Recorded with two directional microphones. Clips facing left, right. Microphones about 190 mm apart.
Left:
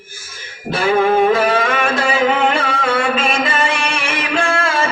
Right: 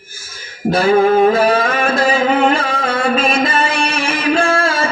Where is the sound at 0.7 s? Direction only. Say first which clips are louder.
Right 3 dB; 40° right (ahead or behind).